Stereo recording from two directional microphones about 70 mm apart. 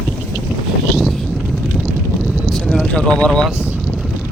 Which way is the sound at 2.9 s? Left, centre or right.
Centre.